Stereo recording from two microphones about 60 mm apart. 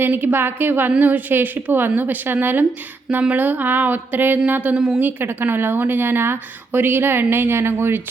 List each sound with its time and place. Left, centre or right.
0.0 s a woman's voice: right